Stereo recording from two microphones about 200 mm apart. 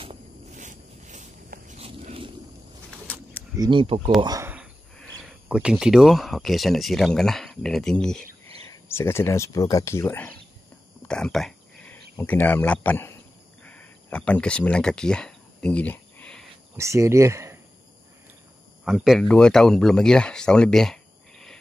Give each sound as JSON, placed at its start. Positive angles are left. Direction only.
{"t": 0.0, "sound": "zipper", "side_deg": -35}
{"t": 3.5, "sound": "speech", "side_deg": -20}
{"t": 4.2, "sound": "a sound", "side_deg": -15}
{"t": 5.5, "sound": "speech", "side_deg": -5}
{"t": 11.1, "sound": "a sound", "side_deg": 5}
{"t": 12.2, "sound": "speech", "side_deg": 10}
{"t": 13.7, "sound": "a sound", "side_deg": 5}
{"t": 16.7, "sound": "speech", "side_deg": -15}
{"t": 18.9, "sound": "speech", "side_deg": 0}